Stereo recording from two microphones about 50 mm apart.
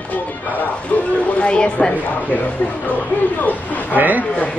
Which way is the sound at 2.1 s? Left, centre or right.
Left.